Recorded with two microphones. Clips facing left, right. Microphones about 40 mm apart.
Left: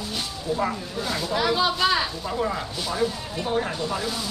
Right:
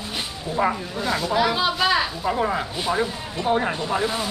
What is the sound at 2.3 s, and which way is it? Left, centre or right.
Speech, right.